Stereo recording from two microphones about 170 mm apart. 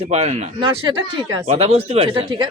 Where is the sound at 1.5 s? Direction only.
40° right (ahead or behind).